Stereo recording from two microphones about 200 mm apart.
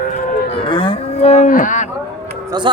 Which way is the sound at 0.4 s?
25° left (ahead or behind).